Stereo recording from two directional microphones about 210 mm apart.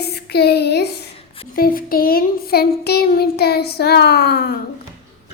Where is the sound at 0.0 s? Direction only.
50° left (ahead or behind).